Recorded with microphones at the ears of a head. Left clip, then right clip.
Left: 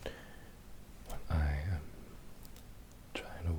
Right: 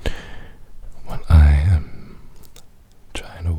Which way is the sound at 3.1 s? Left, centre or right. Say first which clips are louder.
Right 10 dB; right.